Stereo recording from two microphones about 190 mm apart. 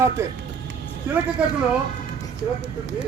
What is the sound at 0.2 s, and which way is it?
Speech, 15° right (ahead or behind).